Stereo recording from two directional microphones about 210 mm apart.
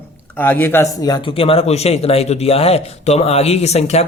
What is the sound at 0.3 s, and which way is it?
Speech, 10° left (ahead or behind).